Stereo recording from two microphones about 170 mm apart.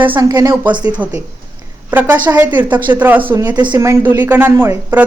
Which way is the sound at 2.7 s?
25° right (ahead or behind).